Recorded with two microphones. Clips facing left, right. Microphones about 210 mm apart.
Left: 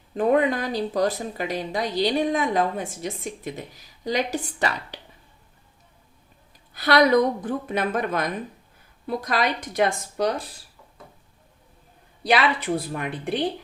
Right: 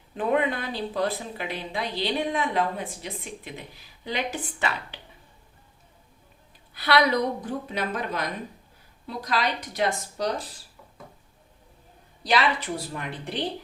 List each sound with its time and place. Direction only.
0.1 s speech: 40° left (ahead or behind)
6.7 s a woman's voice: 45° left (ahead or behind)
12.2 s a woman's voice: 55° left (ahead or behind)